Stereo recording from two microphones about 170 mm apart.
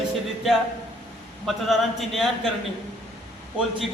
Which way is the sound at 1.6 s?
Centre (ahead or behind).